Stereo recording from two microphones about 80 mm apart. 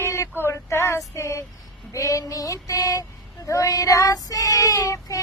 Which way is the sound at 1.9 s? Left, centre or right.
Left.